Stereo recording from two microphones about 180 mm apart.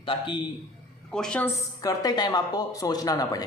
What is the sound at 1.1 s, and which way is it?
Speech, 5° left (ahead or behind).